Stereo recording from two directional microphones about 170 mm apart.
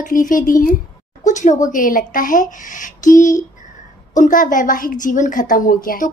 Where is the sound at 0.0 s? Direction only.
50° left (ahead or behind).